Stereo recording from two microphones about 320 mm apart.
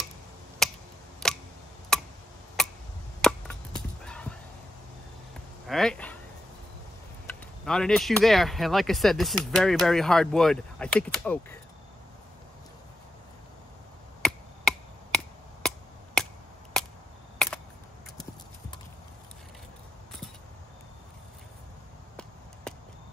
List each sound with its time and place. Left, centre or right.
0.6 s a sound: centre
1.9 s tick: centre
2.6 s chop: centre
4.0 s dog: centre
5.7 s speech: centre
7.2 s speech: centre
14.2 s chop: centre